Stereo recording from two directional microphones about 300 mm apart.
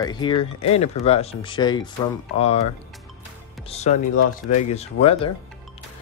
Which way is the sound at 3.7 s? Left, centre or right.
Left.